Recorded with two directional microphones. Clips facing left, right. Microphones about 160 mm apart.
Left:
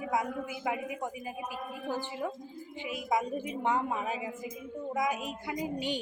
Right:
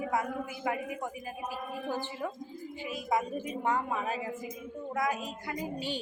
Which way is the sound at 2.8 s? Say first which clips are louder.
Even; 15° left (ahead or behind).